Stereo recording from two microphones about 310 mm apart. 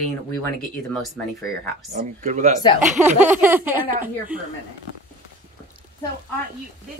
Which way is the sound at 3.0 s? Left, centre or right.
Centre.